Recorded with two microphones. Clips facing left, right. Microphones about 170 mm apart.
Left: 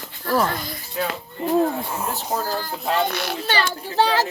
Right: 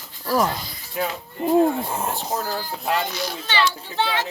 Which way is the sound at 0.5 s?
55° left (ahead or behind).